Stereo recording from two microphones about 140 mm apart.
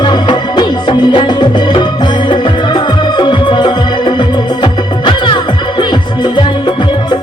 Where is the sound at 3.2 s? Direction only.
35° left (ahead or behind).